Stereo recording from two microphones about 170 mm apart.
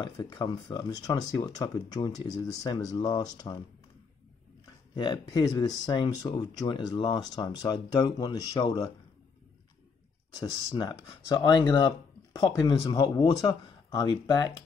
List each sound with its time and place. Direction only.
0.0 s speech: 25° left (ahead or behind)
4.9 s speech: 25° left (ahead or behind)
10.4 s speech: 25° left (ahead or behind)